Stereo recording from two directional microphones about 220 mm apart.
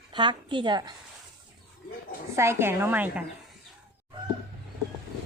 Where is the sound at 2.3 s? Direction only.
10° right (ahead or behind).